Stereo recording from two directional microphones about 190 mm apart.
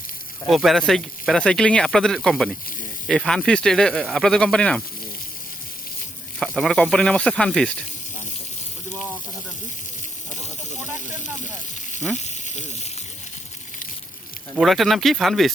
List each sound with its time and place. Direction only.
0.4 s speech: centre (ahead or behind)
6.4 s speech: centre (ahead or behind)
11.0 s a sound: 40° left (ahead or behind)
12.1 s sizzle: 40° left (ahead or behind)
14.5 s speech: centre (ahead or behind)